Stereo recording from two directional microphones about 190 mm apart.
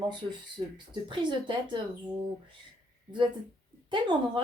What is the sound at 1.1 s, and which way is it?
Speech, 25° right (ahead or behind).